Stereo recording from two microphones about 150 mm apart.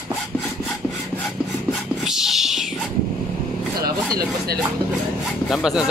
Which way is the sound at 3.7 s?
90° right.